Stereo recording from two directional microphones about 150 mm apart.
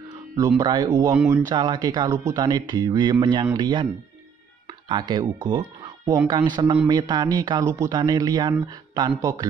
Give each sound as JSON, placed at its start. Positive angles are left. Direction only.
{"t": 0.6, "sound": "speech", "side_deg": -25}
{"t": 1.1, "sound": "speech", "side_deg": -10}
{"t": 1.5, "sound": "speech", "side_deg": -30}